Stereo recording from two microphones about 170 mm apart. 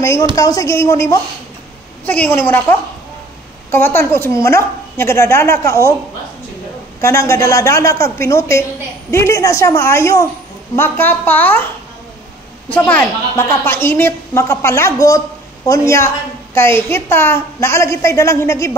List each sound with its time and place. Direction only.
0.0 s a woman's voice: 20° left (ahead or behind)
7.0 s a woman's voice: 15° left (ahead or behind)